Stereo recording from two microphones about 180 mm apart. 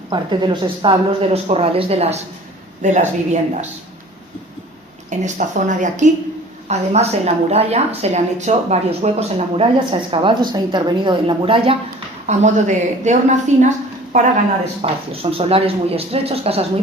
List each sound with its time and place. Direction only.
0.1 s a woman's voice: 25° right (ahead or behind); by 3.7 s 40° right (ahead or behind)
5.2 s a woman's voice: 45° right (ahead or behind)
12.2 s a woman's voice: 40° right (ahead or behind)